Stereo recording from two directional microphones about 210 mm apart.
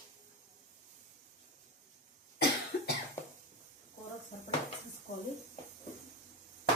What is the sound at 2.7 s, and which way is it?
Cough, 45° left (ahead or behind).